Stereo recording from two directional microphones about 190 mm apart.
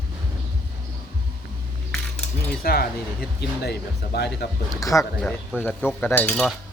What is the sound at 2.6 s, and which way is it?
Speech, 55° left (ahead or behind).